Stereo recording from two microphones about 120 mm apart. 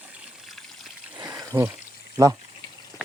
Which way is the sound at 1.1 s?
35° right (ahead or behind).